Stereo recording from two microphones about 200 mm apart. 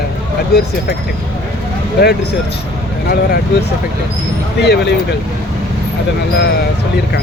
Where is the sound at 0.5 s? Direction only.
50° left (ahead or behind).